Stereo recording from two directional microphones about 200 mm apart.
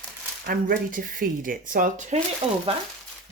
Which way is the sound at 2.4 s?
25° right (ahead or behind).